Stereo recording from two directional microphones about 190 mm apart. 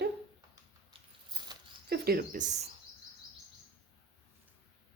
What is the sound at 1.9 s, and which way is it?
Speech, 55° right (ahead or behind).